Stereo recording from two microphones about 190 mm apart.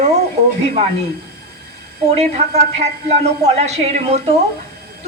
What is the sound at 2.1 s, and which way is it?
A woman's voice, 35° right (ahead or behind).